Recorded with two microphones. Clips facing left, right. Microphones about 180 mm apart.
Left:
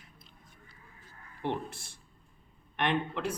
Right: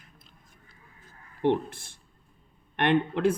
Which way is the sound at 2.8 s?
60° right (ahead or behind).